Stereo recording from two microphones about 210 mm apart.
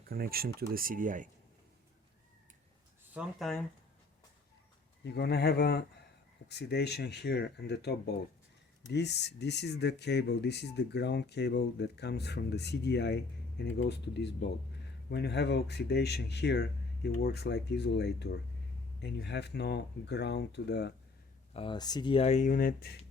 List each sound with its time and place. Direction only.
0.0 s speech: 45° right (ahead or behind)
3.2 s speech: centre (ahead or behind)
5.0 s speech: 50° left (ahead or behind)
21.5 s speech: 25° left (ahead or behind); by 23.0 s 45° left (ahead or behind)